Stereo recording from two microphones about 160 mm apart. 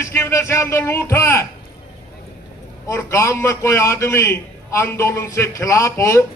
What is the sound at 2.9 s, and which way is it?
A man's voice, 20° left (ahead or behind).